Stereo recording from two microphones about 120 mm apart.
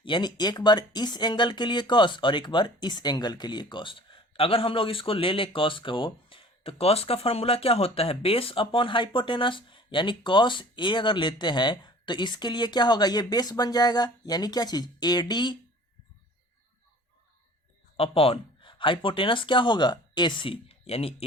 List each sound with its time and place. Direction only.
0.0 s speech: 40° left (ahead or behind)
17.9 s speech: 50° left (ahead or behind)